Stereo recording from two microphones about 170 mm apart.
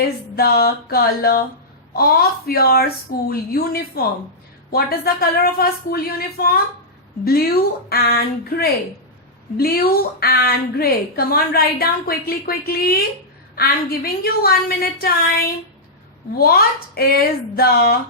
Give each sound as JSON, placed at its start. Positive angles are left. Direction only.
{"t": 0.0, "sound": "a woman's voice", "side_deg": 65}
{"t": 16.4, "sound": "a woman's voice", "side_deg": 65}